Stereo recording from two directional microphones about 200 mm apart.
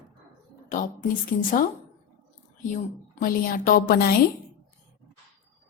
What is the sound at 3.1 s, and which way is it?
A woman's voice, 40° left (ahead or behind).